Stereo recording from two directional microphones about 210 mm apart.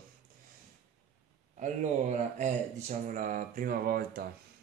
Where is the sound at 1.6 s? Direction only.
35° right (ahead or behind).